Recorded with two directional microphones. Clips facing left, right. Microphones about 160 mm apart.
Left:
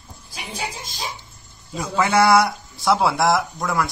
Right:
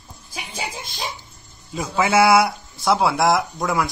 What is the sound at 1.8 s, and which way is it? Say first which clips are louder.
Speech: right 1 dB; 5° right (ahead or behind).